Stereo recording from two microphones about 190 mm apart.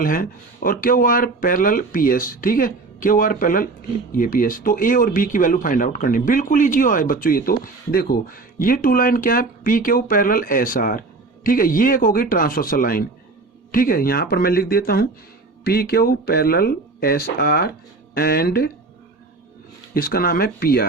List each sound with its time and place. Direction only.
0.0 s speech: 45° left (ahead or behind)
19.9 s speech: 50° left (ahead or behind)